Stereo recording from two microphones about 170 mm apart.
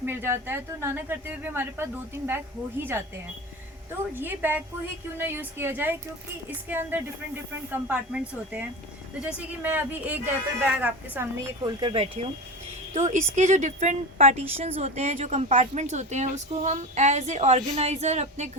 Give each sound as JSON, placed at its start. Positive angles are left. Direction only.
{"t": 0.0, "sound": "a woman's voice", "side_deg": -15}
{"t": 4.1, "sound": "a woman's voice", "side_deg": -10}
{"t": 11.6, "sound": "speech", "side_deg": -30}
{"t": 12.9, "sound": "a woman's voice", "side_deg": -45}